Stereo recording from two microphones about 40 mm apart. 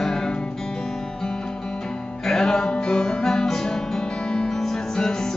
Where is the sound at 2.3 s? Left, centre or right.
Centre.